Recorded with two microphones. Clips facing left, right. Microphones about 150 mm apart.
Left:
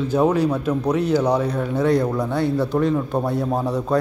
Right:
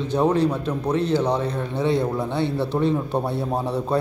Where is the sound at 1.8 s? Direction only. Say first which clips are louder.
Left 2 dB; 25° right (ahead or behind).